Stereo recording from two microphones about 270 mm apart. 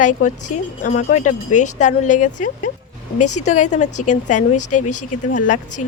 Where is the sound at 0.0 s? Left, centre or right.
Left.